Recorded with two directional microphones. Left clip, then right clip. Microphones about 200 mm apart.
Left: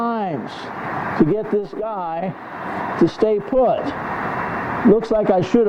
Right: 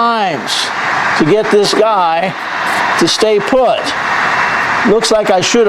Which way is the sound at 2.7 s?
5° right (ahead or behind).